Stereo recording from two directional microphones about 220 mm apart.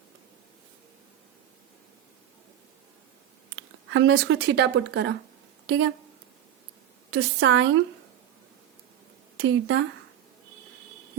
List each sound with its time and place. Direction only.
3.5 s speech: 60° right (ahead or behind)
7.1 s a woman's voice: 60° right (ahead or behind)
9.4 s a woman's voice: 60° right (ahead or behind)